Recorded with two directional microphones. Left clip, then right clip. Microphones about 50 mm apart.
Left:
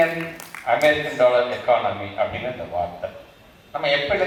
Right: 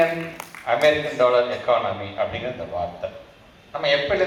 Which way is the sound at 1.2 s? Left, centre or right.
Right.